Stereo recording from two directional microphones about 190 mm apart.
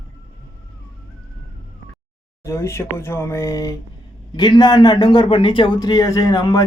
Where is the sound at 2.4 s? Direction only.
15° left (ahead or behind).